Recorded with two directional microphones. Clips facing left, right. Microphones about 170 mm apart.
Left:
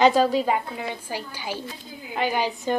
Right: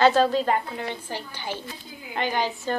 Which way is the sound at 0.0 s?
10° left (ahead or behind).